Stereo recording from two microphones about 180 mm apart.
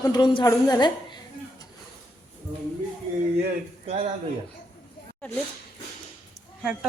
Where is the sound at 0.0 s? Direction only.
25° left (ahead or behind).